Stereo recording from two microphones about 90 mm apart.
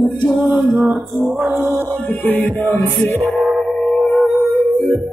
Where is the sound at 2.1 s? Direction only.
20° left (ahead or behind).